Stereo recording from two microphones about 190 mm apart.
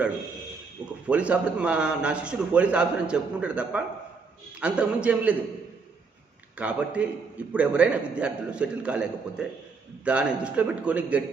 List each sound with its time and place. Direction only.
1.0 s a man's voice: 5° right (ahead or behind)
6.6 s a man's voice: 5° right (ahead or behind)